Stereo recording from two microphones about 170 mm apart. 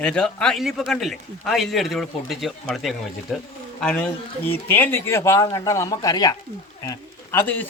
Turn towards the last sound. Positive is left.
turn(degrees=10)  # may be behind; listen again after turning